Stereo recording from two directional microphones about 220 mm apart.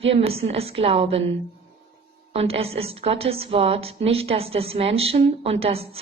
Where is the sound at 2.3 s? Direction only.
25° right (ahead or behind).